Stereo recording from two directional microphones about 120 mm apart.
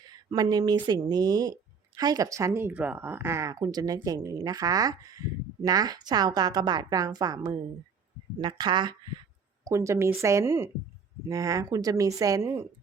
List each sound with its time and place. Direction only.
0.1 s speech: 30° right (ahead or behind)
9.6 s speech: 25° right (ahead or behind)